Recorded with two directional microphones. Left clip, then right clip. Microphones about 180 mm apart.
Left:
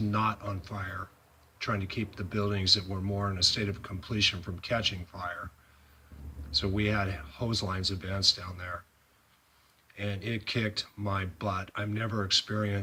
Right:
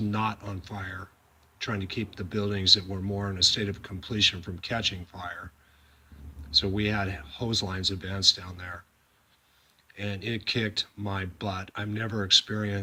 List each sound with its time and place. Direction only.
0.1 s speech: 20° right (ahead or behind)
6.5 s speech: 20° right (ahead or behind)
9.9 s speech: 20° right (ahead or behind)